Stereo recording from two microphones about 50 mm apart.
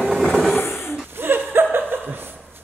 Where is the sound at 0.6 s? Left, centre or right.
Left.